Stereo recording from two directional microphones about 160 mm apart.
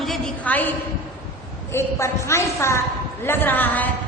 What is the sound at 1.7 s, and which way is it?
A woman's voice, 15° left (ahead or behind).